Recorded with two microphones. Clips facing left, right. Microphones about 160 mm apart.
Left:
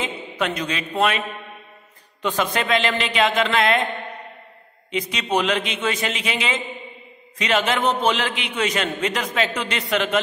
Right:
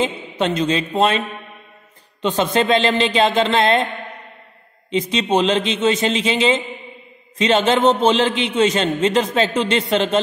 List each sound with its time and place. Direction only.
0.0 s a man's voice: 25° right (ahead or behind)
2.2 s a man's voice: 25° right (ahead or behind)
4.9 s a man's voice: 25° right (ahead or behind)